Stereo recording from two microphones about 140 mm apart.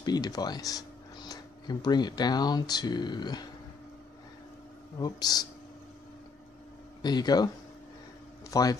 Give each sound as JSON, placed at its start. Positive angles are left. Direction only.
{"t": 0.0, "sound": "speech", "side_deg": 30}
{"t": 4.9, "sound": "speech", "side_deg": 30}
{"t": 7.0, "sound": "speech", "side_deg": 30}